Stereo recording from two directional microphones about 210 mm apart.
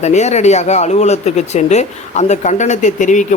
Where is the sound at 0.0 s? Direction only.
35° left (ahead or behind).